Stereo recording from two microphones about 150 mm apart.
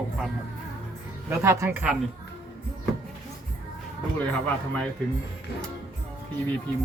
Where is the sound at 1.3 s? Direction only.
20° right (ahead or behind).